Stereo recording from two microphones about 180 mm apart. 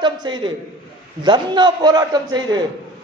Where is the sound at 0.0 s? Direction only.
25° right (ahead or behind).